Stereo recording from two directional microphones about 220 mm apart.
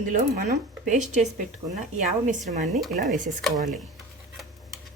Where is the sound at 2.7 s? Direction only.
Centre (ahead or behind).